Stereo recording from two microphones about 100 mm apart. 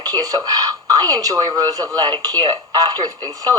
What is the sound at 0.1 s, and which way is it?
Speech, 40° right (ahead or behind).